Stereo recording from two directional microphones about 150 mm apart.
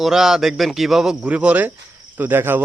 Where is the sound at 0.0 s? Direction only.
5° right (ahead or behind).